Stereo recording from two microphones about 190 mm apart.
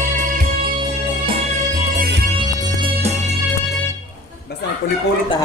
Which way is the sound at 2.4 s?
25° right (ahead or behind).